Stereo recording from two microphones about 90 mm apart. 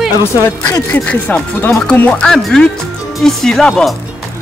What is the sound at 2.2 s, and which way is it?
Speech, 5° left (ahead or behind).